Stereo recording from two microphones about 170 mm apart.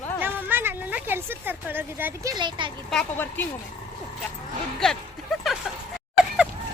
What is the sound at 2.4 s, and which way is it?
Speech, 30° right (ahead or behind).